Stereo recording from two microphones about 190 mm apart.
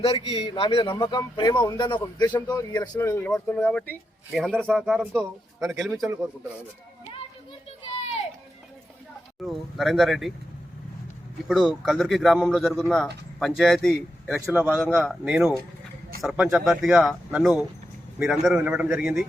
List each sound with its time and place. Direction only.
0.0 s speech: 30° left (ahead or behind); by 6.1 s centre (ahead or behind)
9.4 s speech: centre (ahead or behind)
11.4 s a man's voice: centre (ahead or behind)